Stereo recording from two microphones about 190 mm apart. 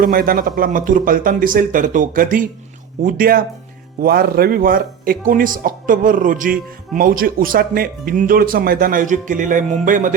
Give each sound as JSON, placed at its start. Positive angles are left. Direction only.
{"t": 0.0, "sound": "speech", "side_deg": -50}